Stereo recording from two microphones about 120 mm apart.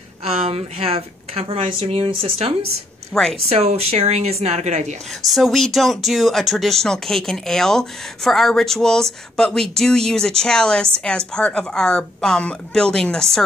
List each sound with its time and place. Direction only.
0.2 s a woman's voice: 60° right (ahead or behind)
3.1 s speech: 5° left (ahead or behind)
3.4 s a woman's voice: 55° right (ahead or behind)
5.3 s speech: centre (ahead or behind)